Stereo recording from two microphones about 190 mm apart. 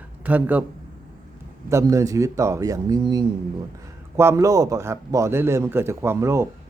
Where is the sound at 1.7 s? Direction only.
15° right (ahead or behind).